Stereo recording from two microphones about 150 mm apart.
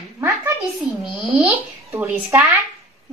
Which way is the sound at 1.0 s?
5° right (ahead or behind).